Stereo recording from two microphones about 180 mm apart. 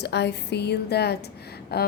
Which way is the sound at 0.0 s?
70° left (ahead or behind).